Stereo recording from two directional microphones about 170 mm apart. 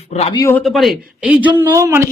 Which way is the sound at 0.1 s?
35° left (ahead or behind).